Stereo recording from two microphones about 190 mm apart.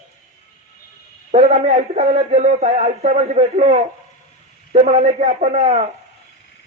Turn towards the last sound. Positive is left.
turn(degrees=-40)  # may be behind; listen again after turning